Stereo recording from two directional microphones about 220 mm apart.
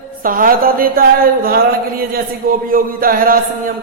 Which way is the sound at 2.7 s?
40° right (ahead or behind).